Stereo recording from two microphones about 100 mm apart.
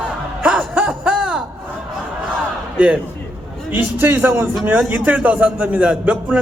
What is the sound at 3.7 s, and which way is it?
A man's voice, 20° right (ahead or behind).